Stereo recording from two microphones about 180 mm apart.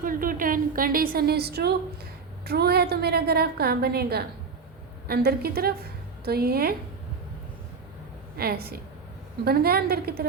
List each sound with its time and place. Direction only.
0.0 s a woman's voice: 50° right (ahead or behind)
8.4 s a woman's voice: 60° right (ahead or behind)